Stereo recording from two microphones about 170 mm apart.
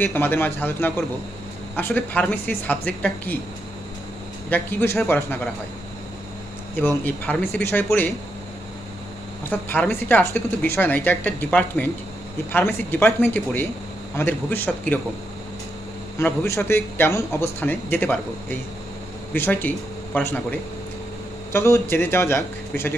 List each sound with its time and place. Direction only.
0.0 s a woman's voice: 10° left (ahead or behind)
4.5 s a woman's voice: 10° left (ahead or behind)
6.9 s a woman's voice: 10° left (ahead or behind)
9.4 s a woman's voice: 10° left (ahead or behind)
16.2 s a woman's voice: 15° left (ahead or behind)
21.5 s a woman's voice: 15° left (ahead or behind)